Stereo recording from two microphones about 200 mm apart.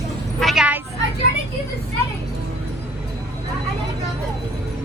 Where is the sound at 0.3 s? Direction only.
Centre (ahead or behind).